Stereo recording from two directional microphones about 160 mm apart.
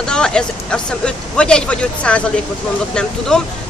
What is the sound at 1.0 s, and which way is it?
Speech, 5° left (ahead or behind).